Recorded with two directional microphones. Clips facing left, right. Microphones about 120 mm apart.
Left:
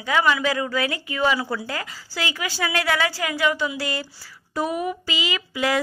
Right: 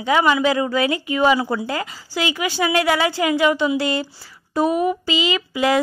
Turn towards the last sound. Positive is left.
turn(degrees=-25)  # may be behind; listen again after turning